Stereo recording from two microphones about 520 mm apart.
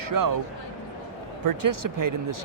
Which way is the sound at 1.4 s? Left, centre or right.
Right.